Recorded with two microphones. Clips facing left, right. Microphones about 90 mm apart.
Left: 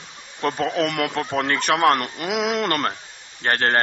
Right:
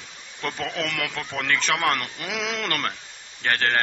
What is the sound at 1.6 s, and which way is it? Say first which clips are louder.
Speech: left 8 dB; 50° left (ahead or behind).